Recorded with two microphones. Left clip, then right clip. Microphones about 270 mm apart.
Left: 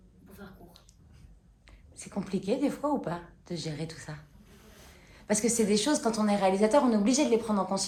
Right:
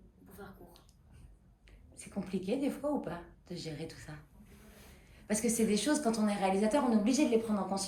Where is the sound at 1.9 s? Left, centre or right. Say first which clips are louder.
Left 5 dB; left.